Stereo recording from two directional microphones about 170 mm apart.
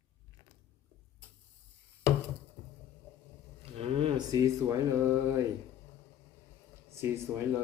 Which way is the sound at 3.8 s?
35° right (ahead or behind).